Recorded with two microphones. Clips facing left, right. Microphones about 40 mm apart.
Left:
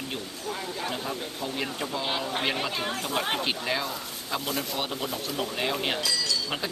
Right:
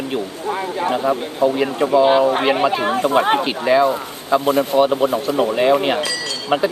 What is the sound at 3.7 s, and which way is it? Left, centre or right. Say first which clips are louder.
Speech: right 17 dB; centre.